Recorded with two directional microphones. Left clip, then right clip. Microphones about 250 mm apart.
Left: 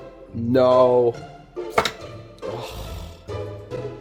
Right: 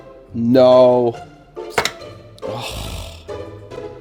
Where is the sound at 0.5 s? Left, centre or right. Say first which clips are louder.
Right 5 dB; right.